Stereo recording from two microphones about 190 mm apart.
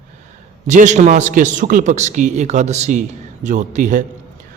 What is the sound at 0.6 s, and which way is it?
A man's voice, 40° right (ahead or behind).